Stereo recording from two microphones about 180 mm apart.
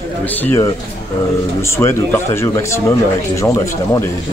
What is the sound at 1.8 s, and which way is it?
Speech, 15° left (ahead or behind).